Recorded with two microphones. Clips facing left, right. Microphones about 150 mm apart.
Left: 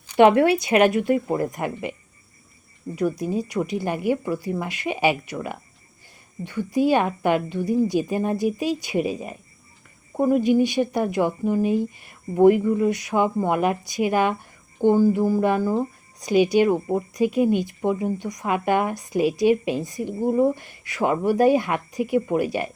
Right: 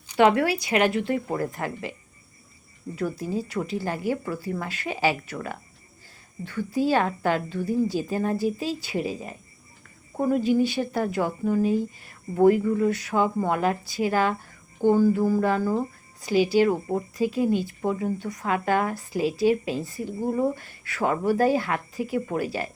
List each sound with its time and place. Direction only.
0.2 s a woman's voice: 20° left (ahead or behind)